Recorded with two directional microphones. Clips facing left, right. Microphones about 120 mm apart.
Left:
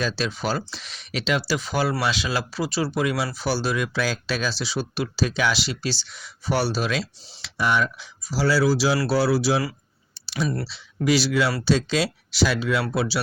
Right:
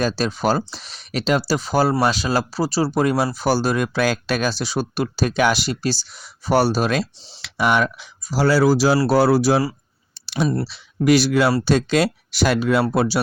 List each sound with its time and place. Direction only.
0.0 s speech: 45° right (ahead or behind); by 7.9 s 65° right (ahead or behind)
8.3 s speech: 50° right (ahead or behind)
10.2 s a sound: 55° right (ahead or behind)
10.7 s speech: 55° right (ahead or behind)